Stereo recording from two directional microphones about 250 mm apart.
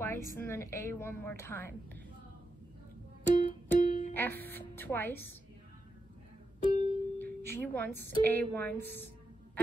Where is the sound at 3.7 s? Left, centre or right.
Left.